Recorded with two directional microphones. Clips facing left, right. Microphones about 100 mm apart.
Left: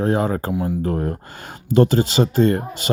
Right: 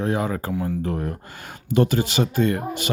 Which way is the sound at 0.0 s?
45° left (ahead or behind).